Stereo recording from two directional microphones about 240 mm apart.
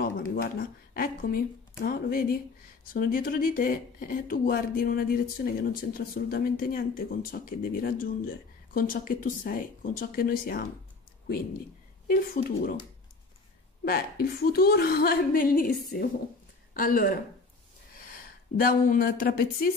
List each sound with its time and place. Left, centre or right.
0.0 s speech: left
12.1 s speech: left
13.8 s speech: left